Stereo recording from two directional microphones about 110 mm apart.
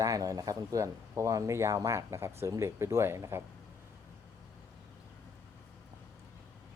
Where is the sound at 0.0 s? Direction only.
30° right (ahead or behind).